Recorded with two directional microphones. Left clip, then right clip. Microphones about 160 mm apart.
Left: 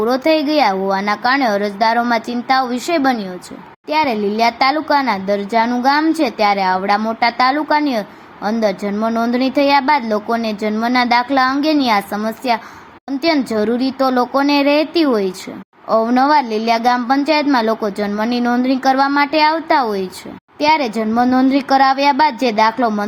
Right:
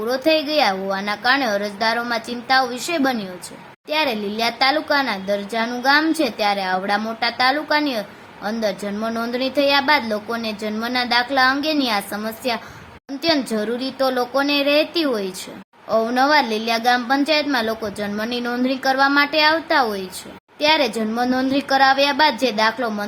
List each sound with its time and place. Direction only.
0.1 s a woman's voice: 15° left (ahead or behind)